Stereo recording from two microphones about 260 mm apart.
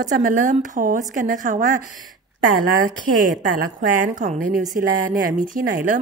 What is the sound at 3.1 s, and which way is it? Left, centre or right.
A woman's voice, right.